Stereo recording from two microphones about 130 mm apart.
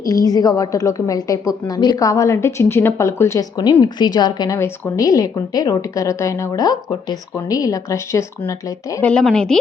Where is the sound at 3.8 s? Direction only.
35° left (ahead or behind).